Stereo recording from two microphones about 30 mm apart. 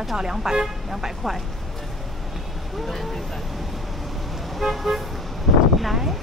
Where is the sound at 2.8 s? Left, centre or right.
Centre.